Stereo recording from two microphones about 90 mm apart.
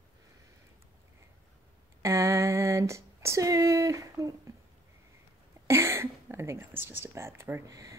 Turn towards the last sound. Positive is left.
turn(degrees=-35)  # may be behind; listen again after turning